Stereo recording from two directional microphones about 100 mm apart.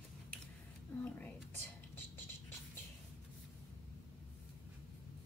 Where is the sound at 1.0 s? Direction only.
15° left (ahead or behind).